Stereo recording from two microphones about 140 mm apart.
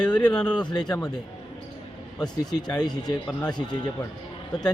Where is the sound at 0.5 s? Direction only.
30° left (ahead or behind).